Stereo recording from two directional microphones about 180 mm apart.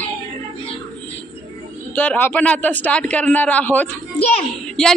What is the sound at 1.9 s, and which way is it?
A woman's voice, 10° left (ahead or behind).